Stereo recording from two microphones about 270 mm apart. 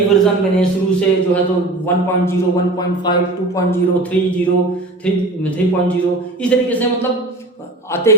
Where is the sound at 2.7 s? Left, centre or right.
Centre.